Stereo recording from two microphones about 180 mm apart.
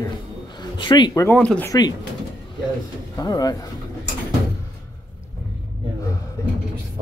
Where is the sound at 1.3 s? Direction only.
5° left (ahead or behind).